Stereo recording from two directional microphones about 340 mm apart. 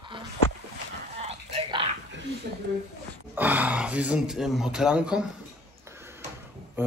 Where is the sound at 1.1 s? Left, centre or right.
Centre.